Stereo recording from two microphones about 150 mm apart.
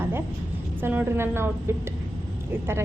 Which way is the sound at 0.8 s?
15° right (ahead or behind).